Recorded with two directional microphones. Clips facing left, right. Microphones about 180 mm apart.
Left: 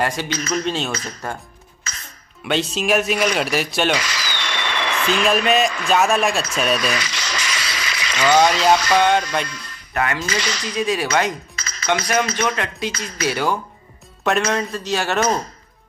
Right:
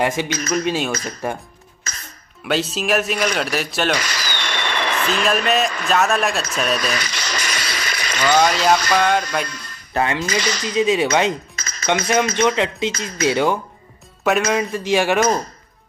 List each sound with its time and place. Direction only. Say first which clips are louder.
0.0 s speech: right 2 dB; 15° right (ahead or behind)
2.4 s speech: even; 5° right (ahead or behind)
4.1 s a sound: right 1 dB; 45° right (ahead or behind)
5.2 s speech: left 2 dB; centre (ahead or behind)
6.9 s a sound: even; 45° right (ahead or behind)
8.3 s speech: left 1 dB; centre (ahead or behind)
9.5 s music: right 3 dB; 40° right (ahead or behind)
10.2 s speech: right 3 dB; 40° right (ahead or behind)
10.6 s speech: right 6 dB; 20° right (ahead or behind)
11.5 s chink: even; 45° right (ahead or behind)
11.8 s speech: right 2 dB; 20° right (ahead or behind)
14.2 s speech: right 2 dB; 5° right (ahead or behind)